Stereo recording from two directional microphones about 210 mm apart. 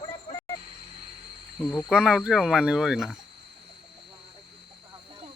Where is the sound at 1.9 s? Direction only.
Centre (ahead or behind).